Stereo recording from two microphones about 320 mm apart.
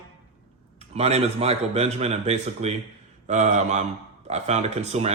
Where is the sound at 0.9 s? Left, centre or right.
Centre.